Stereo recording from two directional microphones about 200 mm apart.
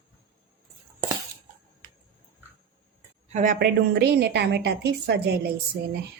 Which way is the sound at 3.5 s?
55° right (ahead or behind).